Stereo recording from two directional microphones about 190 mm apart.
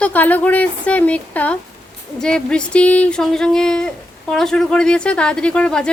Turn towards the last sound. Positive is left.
turn(degrees=5)  # may be behind; listen again after turning